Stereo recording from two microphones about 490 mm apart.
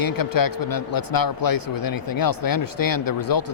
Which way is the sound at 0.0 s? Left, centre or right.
Left.